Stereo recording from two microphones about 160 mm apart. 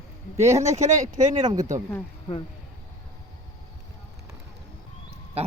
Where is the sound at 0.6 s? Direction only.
45° right (ahead or behind).